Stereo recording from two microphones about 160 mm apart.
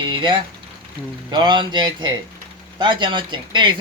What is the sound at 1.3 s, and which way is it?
Speech, 25° right (ahead or behind).